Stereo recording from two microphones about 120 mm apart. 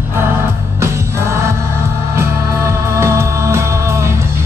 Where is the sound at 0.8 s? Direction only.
25° right (ahead or behind).